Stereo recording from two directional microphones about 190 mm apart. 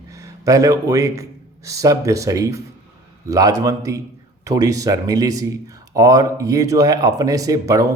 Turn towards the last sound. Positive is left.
turn(degrees=-20)  # may be behind; listen again after turning